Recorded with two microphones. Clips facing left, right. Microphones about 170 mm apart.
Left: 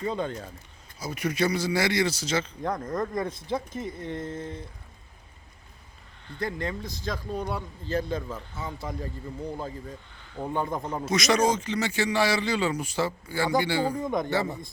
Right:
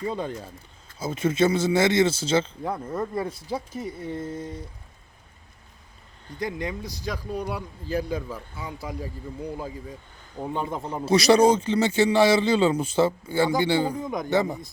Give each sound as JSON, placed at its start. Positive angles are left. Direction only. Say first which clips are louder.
{"t": 0.1, "sound": "speech", "louder": "even", "side_deg": -10}
{"t": 0.9, "sound": "a man's voice", "louder": "right 5 dB", "side_deg": -25}
{"t": 2.6, "sound": "speech", "louder": "even", "side_deg": -5}
{"t": 6.4, "sound": "a man's voice", "louder": "right 1 dB", "side_deg": -15}
{"t": 13.9, "sound": "a man's voice", "louder": "left 2 dB", "side_deg": 0}
{"t": 14.3, "sound": "speech", "louder": "right 4 dB", "side_deg": -15}